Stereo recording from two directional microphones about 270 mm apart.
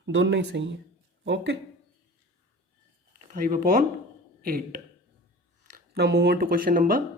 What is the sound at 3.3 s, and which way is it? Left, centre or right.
Speech, right.